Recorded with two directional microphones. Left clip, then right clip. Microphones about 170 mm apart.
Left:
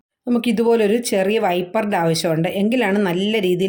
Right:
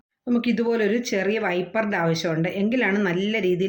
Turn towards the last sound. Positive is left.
turn(degrees=45)  # may be behind; listen again after turning